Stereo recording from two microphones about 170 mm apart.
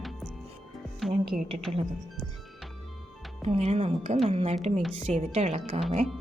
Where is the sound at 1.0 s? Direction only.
Centre (ahead or behind).